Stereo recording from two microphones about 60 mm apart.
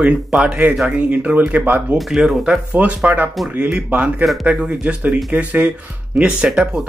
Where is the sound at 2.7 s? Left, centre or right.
Right.